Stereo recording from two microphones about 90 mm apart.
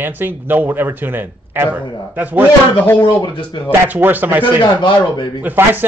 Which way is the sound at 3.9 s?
20° right (ahead or behind).